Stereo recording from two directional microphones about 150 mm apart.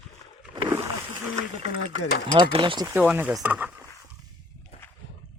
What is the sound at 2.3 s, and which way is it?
Speech, 35° right (ahead or behind).